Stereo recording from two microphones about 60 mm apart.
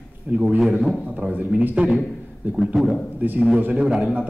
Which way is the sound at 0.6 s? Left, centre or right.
Centre.